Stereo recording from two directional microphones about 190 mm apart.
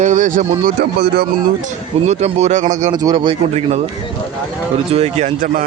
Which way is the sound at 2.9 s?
20° right (ahead or behind).